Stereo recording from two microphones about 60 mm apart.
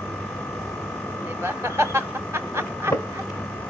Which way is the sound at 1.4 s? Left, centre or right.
Right.